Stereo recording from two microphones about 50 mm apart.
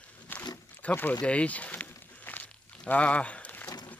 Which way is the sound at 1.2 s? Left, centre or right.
Left.